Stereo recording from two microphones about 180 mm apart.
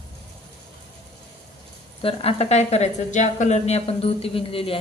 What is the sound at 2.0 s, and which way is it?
A woman's voice, 35° left (ahead or behind).